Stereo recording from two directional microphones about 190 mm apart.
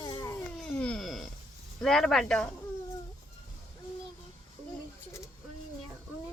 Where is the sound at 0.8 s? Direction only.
Centre (ahead or behind).